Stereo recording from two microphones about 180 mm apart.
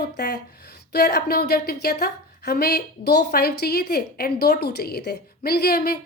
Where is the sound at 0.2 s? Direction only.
60° left (ahead or behind).